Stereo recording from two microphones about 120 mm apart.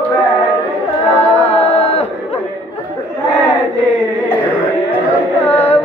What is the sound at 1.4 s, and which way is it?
Music, 60° left (ahead or behind).